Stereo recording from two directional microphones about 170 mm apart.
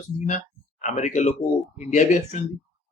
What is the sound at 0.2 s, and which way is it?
Speech, 45° left (ahead or behind).